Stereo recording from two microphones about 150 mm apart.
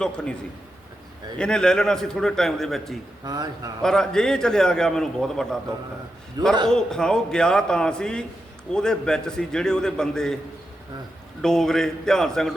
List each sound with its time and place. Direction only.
0.0 s a man's voice: 5° left (ahead or behind)
1.4 s a man's voice: 5° left (ahead or behind)
3.2 s a man's voice: 25° right (ahead or behind)
3.8 s a man's voice: 5° left (ahead or behind)
6.7 s a man's voice: 5° left (ahead or behind)
11.4 s a man's voice: 5° left (ahead or behind)